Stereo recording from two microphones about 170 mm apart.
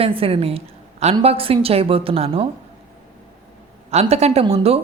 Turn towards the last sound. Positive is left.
turn(degrees=-35)  # may be behind; listen again after turning